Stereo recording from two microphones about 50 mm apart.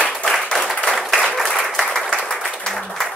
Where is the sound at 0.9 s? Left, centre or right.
Centre.